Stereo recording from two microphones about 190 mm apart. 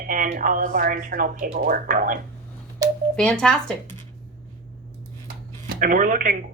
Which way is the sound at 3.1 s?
5° left (ahead or behind).